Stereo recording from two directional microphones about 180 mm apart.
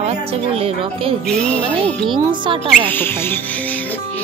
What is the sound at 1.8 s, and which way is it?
Speech, 30° right (ahead or behind).